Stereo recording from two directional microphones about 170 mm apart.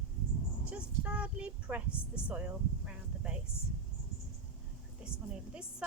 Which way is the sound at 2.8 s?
5° right (ahead or behind).